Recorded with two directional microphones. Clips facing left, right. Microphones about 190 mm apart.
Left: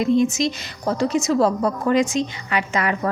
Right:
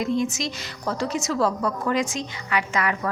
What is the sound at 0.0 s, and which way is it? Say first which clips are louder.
A woman's voice: left 6 dB; 20° left (ahead or behind).